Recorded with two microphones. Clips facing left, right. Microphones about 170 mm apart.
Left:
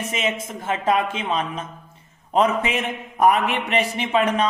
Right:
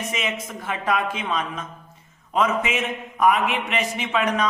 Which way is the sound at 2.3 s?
35° left (ahead or behind).